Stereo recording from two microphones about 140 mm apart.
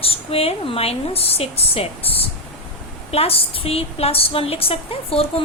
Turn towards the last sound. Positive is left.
turn(degrees=45)  # may be behind; listen again after turning